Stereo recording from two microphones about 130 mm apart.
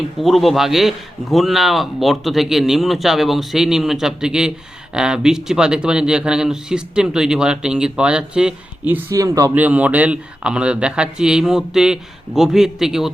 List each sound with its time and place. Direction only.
0.2 s a man's voice: centre (ahead or behind)
9.1 s speech: 25° right (ahead or behind)
9.6 s a man's voice: 10° right (ahead or behind)